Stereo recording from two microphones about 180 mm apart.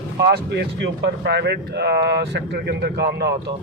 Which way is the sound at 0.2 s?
65° right (ahead or behind).